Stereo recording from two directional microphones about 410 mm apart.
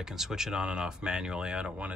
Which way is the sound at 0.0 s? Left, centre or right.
Centre.